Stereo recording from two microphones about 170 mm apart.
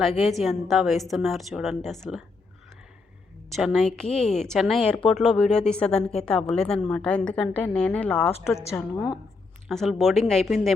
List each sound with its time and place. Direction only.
0.0 s a woman's voice: centre (ahead or behind)
3.5 s a woman's voice: centre (ahead or behind); by 9.1 s 15° left (ahead or behind)
9.6 s a woman's voice: centre (ahead or behind)